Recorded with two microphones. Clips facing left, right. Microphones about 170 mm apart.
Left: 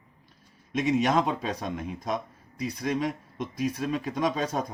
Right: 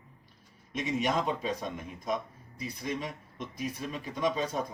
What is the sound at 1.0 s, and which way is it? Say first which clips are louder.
Speech: left 4 dB; 90° left.